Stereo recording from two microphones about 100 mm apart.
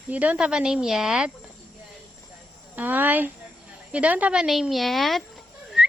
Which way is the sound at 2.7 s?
20° right (ahead or behind).